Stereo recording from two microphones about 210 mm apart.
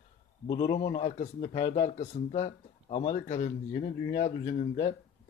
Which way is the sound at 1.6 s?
20° left (ahead or behind).